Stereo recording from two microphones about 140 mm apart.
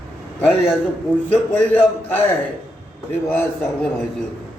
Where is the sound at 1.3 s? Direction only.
15° left (ahead or behind).